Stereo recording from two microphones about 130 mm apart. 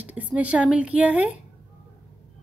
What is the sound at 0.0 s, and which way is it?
A woman's voice, 10° right (ahead or behind).